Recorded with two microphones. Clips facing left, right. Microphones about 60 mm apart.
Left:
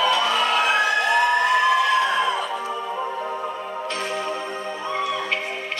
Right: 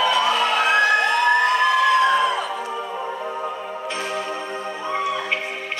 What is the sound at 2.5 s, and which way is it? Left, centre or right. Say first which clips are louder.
Music: left 1 dB; centre.